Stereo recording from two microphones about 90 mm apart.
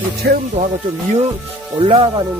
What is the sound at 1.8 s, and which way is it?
Speech, 80° right.